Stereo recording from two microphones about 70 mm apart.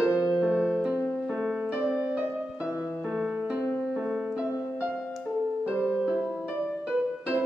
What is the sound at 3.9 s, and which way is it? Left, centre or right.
Music, centre.